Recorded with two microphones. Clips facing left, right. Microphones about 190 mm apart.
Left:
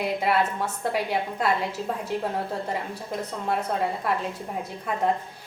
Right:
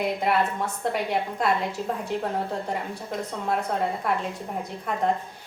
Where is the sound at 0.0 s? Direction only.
Centre (ahead or behind).